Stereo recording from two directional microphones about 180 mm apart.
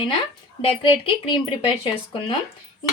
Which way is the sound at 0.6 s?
30° left (ahead or behind).